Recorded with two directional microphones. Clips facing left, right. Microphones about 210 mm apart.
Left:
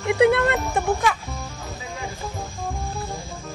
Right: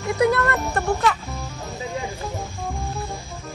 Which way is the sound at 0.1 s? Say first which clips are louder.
Left 2 dB; 15° left (ahead or behind).